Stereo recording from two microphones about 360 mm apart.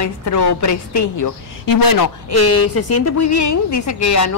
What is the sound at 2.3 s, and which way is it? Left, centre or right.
A woman's voice, left.